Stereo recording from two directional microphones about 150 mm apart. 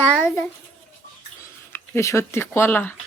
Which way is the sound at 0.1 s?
Centre (ahead or behind).